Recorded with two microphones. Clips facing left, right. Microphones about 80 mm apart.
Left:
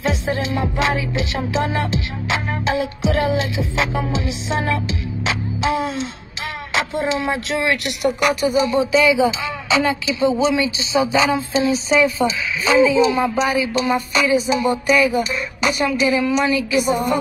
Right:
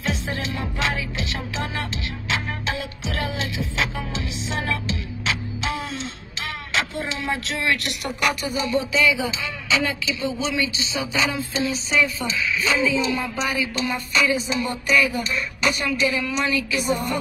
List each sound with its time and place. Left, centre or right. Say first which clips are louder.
0.0 s music: left 6 dB; centre
6.7 s speech: left 7 dB; centre